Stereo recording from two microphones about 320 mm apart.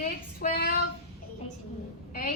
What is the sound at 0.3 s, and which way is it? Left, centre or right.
Child singing, left.